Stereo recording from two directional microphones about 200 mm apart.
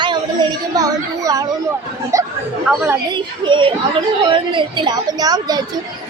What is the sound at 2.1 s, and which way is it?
Speech, 15° right (ahead or behind).